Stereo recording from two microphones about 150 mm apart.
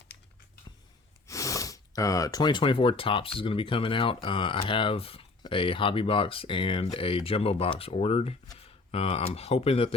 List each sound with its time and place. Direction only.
1.3 s speech: 20° left (ahead or behind); by 9.9 s 40° left (ahead or behind)